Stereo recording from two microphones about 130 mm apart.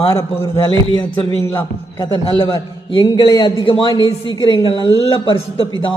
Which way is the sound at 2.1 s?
30° left (ahead or behind).